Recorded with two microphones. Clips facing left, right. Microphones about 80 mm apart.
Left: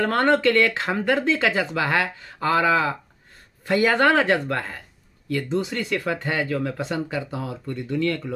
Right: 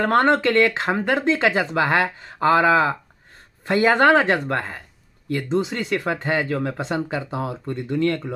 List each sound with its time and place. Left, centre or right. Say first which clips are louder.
0.0 s speech: right 2 dB; right